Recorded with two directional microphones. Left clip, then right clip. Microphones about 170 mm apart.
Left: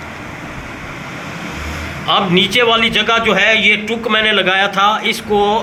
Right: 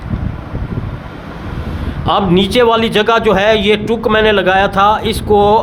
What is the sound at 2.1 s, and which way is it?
A man's voice, 70° right (ahead or behind).